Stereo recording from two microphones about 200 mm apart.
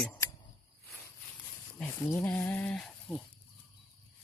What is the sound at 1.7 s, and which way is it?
Speech, 10° left (ahead or behind).